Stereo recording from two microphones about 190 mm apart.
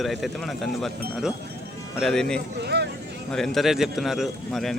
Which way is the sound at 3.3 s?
Centre (ahead or behind).